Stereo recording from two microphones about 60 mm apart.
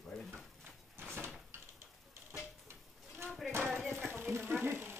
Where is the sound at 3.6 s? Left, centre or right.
Right.